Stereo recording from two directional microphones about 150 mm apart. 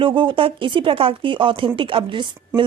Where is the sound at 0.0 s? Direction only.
35° right (ahead or behind).